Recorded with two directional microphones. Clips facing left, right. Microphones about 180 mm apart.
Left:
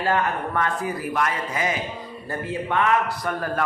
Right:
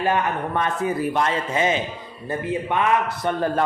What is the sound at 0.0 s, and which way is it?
A man's voice, 20° right (ahead or behind).